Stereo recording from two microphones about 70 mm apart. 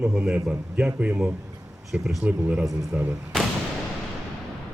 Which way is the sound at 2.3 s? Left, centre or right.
Right.